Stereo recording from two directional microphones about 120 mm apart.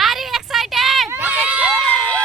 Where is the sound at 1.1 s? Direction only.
15° right (ahead or behind).